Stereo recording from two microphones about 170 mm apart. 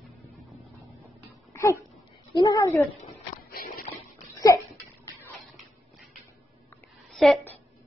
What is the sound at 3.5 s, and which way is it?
Shuffle, 60° left (ahead or behind).